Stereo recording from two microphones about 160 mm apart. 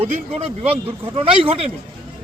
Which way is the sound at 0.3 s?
40° right (ahead or behind).